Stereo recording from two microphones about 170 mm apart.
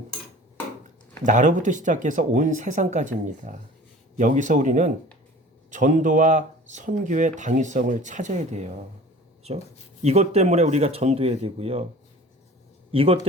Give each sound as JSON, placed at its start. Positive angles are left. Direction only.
{"t": 1.2, "sound": "speech", "side_deg": -50}
{"t": 10.0, "sound": "speech", "side_deg": -40}
{"t": 12.9, "sound": "a man's voice", "side_deg": -35}